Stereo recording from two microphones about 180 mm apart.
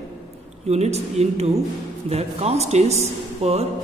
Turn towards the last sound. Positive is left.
turn(degrees=-35)  # may be behind; listen again after turning